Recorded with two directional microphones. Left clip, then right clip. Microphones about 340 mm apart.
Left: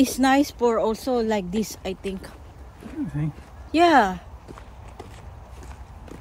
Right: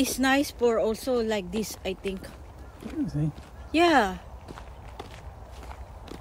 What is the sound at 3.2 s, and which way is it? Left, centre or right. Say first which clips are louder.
Speech: left 1 dB; centre.